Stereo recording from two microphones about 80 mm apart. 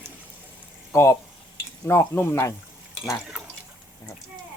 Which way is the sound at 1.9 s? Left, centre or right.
Left.